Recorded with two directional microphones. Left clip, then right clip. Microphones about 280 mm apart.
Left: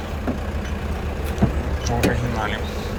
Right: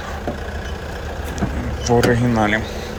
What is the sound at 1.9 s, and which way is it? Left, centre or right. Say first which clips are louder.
Speech: right 7 dB; right.